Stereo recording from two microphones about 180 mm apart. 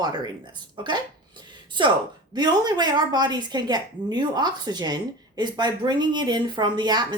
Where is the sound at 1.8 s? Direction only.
25° right (ahead or behind).